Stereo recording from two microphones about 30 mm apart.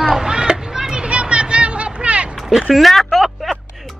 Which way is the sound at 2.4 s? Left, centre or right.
Centre.